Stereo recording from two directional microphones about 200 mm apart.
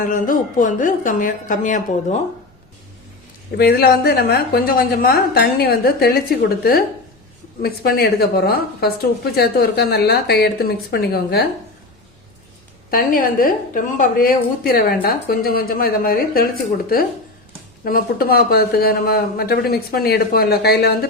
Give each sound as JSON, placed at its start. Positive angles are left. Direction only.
{"t": 0.0, "sound": "a woman's voice", "side_deg": 40}
{"t": 3.6, "sound": "a woman's voice", "side_deg": 50}
{"t": 12.9, "sound": "a woman's voice", "side_deg": 45}